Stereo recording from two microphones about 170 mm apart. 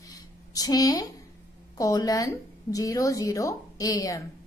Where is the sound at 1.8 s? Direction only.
20° left (ahead or behind).